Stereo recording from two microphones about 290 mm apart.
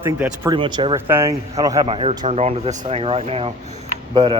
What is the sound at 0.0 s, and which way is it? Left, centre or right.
Speech, centre.